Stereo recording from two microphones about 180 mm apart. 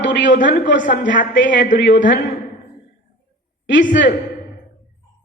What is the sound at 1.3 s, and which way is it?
Speech, 80° left.